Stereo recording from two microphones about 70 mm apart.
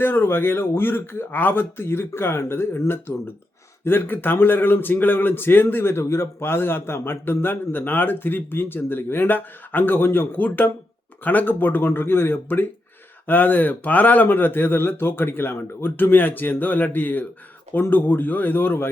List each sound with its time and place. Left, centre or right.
0.0 s a man's voice: left